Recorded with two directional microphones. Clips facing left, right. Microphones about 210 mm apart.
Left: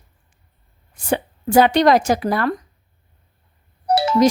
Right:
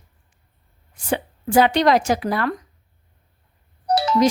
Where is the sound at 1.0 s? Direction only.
45° left (ahead or behind).